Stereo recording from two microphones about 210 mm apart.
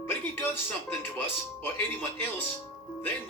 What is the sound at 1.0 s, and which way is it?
Speech, 10° left (ahead or behind).